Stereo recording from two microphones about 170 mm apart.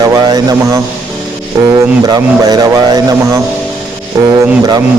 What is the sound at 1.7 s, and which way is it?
Speech, 25° right (ahead or behind).